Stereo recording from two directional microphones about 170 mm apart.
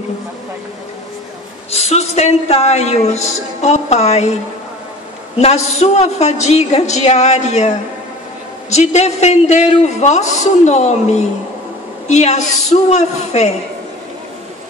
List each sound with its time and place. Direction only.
1.7 s a woman's voice: 40° left (ahead or behind)
5.4 s a woman's voice: 40° left (ahead or behind)